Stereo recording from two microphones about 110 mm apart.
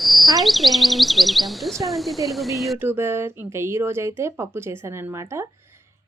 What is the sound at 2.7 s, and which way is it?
Speech, 20° right (ahead or behind).